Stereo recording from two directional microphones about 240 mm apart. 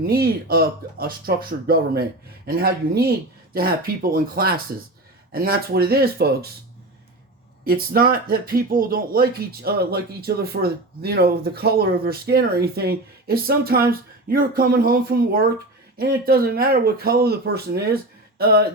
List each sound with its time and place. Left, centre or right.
0.0 s speech: right
7.6 s speech: right
18.3 s speech: right